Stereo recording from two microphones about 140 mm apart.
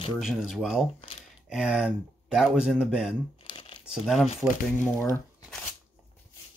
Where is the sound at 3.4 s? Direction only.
35° left (ahead or behind).